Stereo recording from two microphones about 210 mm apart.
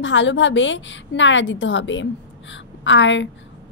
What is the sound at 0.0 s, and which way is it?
A woman's voice, 60° left (ahead or behind).